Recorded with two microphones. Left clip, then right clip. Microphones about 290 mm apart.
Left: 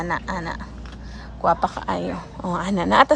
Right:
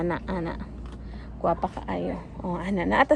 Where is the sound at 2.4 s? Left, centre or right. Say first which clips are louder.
Left 5 dB; left.